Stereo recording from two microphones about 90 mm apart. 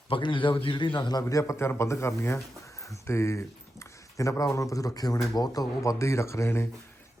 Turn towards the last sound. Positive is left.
turn(degrees=30)  # may be behind; listen again after turning